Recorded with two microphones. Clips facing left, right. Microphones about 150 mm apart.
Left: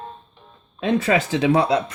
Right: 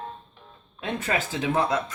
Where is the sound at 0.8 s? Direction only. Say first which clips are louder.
Left 9 dB; 85° left.